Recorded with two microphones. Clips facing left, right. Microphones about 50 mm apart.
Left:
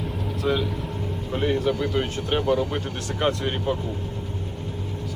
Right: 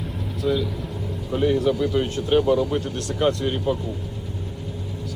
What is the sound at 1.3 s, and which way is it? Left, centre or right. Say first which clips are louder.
Speech: right 3 dB; left.